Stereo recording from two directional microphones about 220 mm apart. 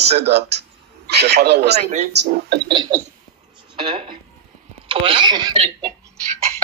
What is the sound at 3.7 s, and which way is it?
Speech, 20° right (ahead or behind).